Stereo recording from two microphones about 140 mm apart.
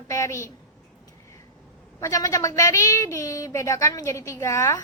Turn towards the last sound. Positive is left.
turn(degrees=20)  # may be behind; listen again after turning